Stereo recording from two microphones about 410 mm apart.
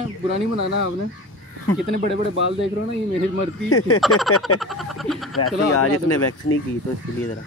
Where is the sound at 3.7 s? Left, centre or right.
Left.